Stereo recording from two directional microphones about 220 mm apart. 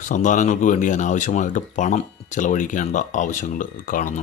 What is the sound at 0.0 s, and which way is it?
Speech, 35° left (ahead or behind).